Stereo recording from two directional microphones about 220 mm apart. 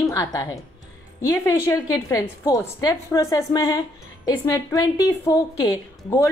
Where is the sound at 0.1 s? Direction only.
15° left (ahead or behind).